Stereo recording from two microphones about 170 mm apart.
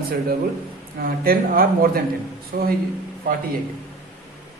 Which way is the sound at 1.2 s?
60° right (ahead or behind).